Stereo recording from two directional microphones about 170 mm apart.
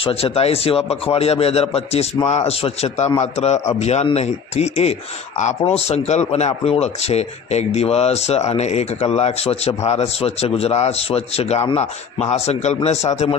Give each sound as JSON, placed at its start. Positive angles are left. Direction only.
{"t": 0.0, "sound": "speech", "side_deg": 35}